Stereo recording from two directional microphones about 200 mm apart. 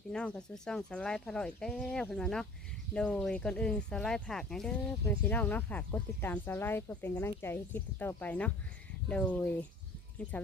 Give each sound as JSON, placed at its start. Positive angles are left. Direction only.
{"t": 0.1, "sound": "speech", "side_deg": 5}